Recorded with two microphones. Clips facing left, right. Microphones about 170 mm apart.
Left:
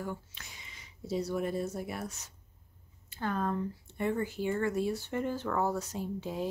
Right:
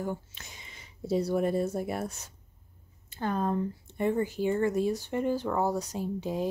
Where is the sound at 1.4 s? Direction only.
30° right (ahead or behind).